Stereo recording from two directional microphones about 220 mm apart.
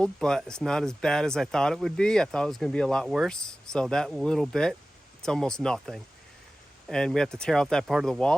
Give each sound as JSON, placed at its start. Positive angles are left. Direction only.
{"t": 0.0, "sound": "speech", "side_deg": 5}